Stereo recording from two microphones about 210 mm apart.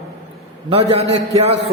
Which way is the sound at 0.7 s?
30° right (ahead or behind).